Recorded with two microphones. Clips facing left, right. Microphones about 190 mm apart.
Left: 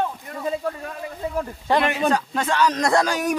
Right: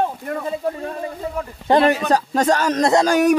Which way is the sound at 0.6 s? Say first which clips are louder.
Right 5 dB; 30° right (ahead or behind).